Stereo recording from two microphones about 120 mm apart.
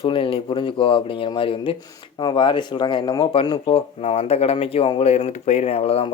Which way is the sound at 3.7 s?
55° left (ahead or behind).